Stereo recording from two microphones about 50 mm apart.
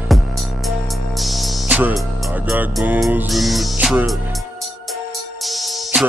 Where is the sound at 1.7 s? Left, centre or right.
Right.